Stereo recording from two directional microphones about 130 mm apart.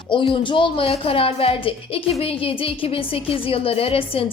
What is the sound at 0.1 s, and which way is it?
A woman's voice, 40° left (ahead or behind).